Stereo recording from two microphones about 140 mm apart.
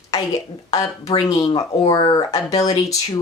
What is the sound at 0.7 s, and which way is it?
Speech, 25° left (ahead or behind).